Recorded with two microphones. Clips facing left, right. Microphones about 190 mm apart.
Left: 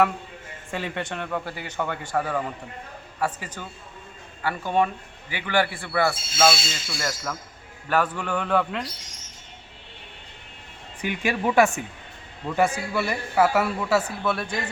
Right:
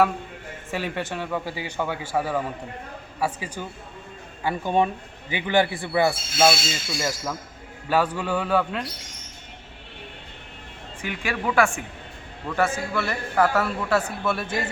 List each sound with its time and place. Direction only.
0.7 s a man's voice: 5° right (ahead or behind)
11.0 s a man's voice: 20° left (ahead or behind); by 14.6 s 5° right (ahead or behind)